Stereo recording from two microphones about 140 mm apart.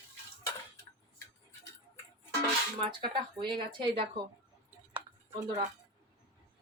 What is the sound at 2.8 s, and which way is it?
Speech, 35° right (ahead or behind).